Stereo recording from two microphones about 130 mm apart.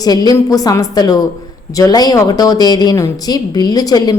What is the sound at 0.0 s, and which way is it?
Speech, 30° left (ahead or behind).